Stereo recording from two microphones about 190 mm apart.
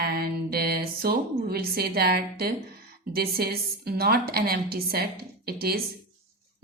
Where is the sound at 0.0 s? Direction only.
55° right (ahead or behind).